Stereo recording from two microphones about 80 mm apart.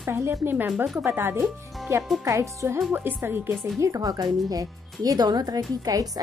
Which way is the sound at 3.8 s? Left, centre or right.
Right.